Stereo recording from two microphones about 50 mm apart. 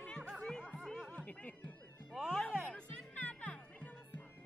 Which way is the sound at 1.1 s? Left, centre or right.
Left.